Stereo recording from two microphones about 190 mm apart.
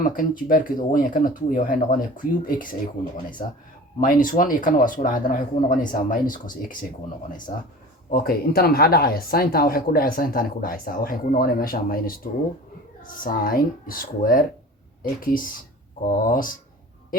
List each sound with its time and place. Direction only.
0.0 s speech: 45° left (ahead or behind)
4.0 s speech: 45° left (ahead or behind)
8.1 s speech: 50° left (ahead or behind)